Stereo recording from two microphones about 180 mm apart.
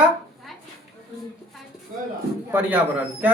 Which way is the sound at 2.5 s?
10° right (ahead or behind).